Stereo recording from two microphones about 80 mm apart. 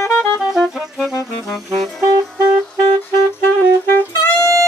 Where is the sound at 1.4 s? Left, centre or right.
Centre.